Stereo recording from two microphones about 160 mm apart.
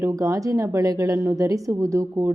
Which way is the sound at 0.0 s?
20° right (ahead or behind).